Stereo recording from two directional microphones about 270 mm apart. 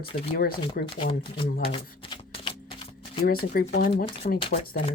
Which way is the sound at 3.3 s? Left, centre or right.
Left.